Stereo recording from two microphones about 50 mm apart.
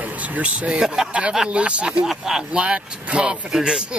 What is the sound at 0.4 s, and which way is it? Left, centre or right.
Speech, centre.